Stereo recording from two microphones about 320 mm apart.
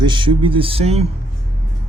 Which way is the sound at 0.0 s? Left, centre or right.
Centre.